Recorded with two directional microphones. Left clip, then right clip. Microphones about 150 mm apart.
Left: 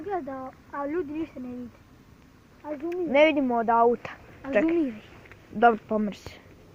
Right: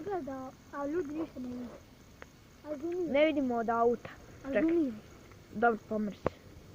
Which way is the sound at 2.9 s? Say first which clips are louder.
Left 8 dB; 40° left (ahead or behind).